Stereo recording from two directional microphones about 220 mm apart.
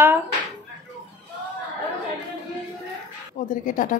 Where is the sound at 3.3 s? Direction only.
35° left (ahead or behind).